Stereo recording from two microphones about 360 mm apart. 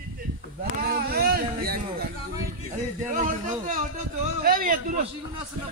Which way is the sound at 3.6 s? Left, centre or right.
Right.